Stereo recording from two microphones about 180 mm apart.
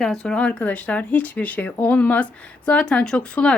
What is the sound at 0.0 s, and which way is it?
Speech, centre (ahead or behind).